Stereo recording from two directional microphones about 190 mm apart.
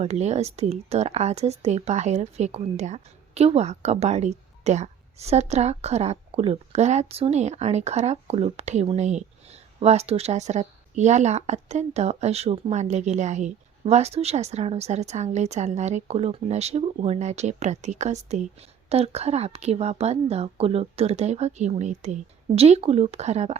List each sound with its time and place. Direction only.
0.0 s speech: 35° right (ahead or behind)